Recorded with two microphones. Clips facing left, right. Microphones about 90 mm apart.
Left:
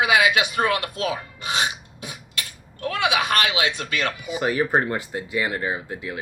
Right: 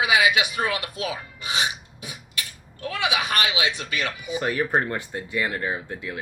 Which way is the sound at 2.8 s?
50° left (ahead or behind).